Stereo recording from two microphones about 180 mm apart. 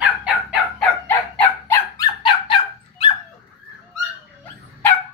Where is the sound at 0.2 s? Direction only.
5° right (ahead or behind).